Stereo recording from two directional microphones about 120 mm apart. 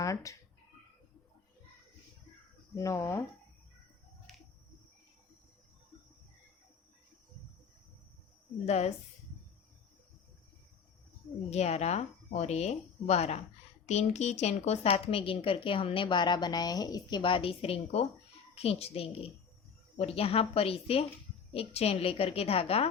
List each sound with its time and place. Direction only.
0.0 s speech: 25° left (ahead or behind)
2.7 s speech: 25° left (ahead or behind)
4.3 s a sound: centre (ahead or behind)
8.6 s a woman's voice: 65° left (ahead or behind)
11.5 s a woman's voice: 65° left (ahead or behind)